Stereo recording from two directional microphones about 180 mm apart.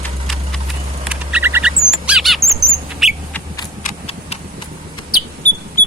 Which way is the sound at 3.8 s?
35° left (ahead or behind).